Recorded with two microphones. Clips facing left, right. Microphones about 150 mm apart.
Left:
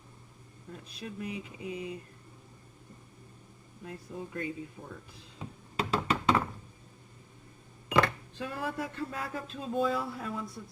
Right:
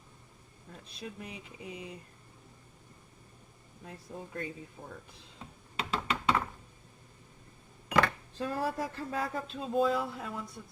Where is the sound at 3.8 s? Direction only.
30° right (ahead or behind).